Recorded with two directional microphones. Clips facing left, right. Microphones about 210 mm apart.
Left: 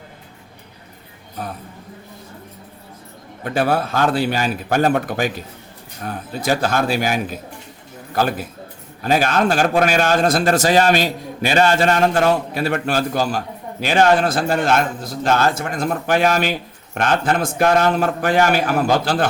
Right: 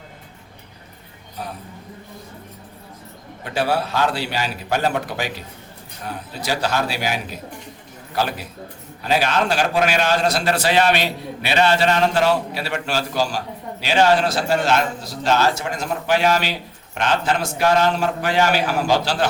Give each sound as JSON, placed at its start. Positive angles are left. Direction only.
{"t": 3.4, "sound": "a man's voice", "side_deg": 50}